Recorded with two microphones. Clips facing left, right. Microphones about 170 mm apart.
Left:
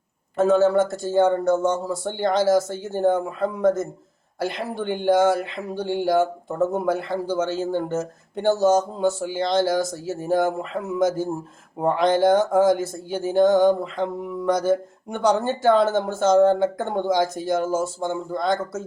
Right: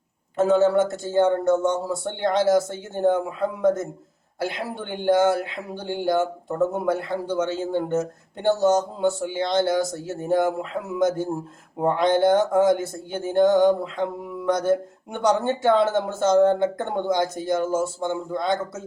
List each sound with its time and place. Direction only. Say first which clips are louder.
0.3 s speech: left 1 dB; centre (ahead or behind)
17.2 s speech: left 1 dB; centre (ahead or behind)